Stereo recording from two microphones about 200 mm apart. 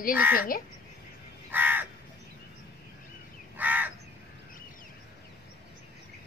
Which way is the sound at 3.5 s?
10° right (ahead or behind).